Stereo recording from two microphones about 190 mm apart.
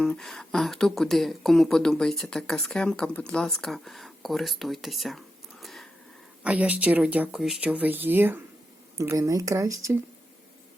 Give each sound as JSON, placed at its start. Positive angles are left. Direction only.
{"t": 0.0, "sound": "speech", "side_deg": 5}